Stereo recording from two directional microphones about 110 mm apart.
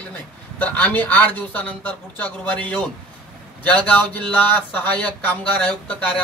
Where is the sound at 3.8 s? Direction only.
15° left (ahead or behind).